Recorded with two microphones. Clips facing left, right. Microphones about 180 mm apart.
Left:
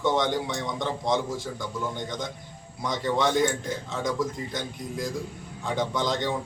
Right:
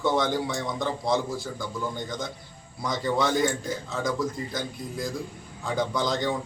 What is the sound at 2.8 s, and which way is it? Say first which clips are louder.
A man's voice: even; centre (ahead or behind).